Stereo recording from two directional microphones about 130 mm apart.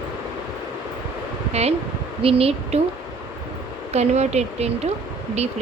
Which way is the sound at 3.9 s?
60° right (ahead or behind).